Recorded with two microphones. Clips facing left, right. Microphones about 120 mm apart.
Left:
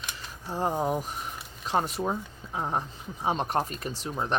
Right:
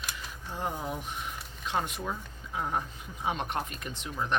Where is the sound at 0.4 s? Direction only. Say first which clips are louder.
Left 7 dB; 35° left (ahead or behind).